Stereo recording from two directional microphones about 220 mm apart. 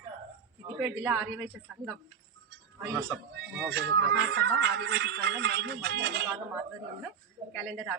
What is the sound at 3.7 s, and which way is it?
Speech, 50° right (ahead or behind).